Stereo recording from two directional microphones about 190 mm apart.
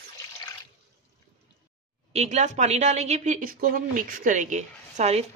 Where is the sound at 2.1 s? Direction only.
35° right (ahead or behind).